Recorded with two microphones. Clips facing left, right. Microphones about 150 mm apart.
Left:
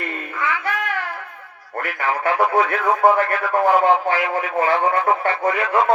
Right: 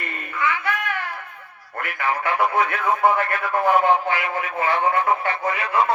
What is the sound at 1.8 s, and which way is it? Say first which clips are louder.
Speech: left 2 dB; 40° left (ahead or behind).